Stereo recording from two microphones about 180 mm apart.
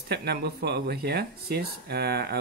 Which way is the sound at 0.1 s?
65° right (ahead or behind).